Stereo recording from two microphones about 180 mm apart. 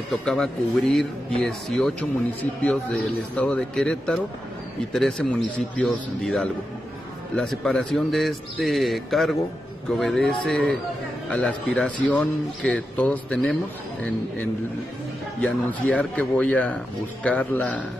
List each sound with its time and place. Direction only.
0.2 s speech: centre (ahead or behind)
15.4 s a man's voice: 5° left (ahead or behind)